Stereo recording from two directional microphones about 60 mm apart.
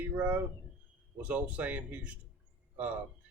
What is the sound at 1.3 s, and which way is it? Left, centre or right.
Speech, right.